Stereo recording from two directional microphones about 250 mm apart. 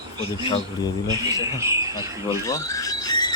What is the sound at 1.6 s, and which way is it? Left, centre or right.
Speech, centre.